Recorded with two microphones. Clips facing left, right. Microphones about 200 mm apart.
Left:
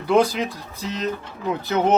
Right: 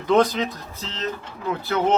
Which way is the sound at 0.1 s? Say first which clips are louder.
Even; 10° left (ahead or behind).